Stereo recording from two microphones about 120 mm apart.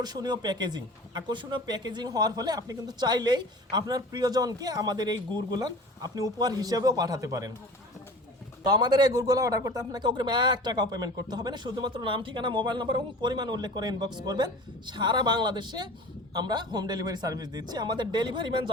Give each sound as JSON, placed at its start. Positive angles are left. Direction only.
{"t": 0.0, "sound": "speech", "side_deg": -35}
{"t": 8.6, "sound": "speech", "side_deg": -35}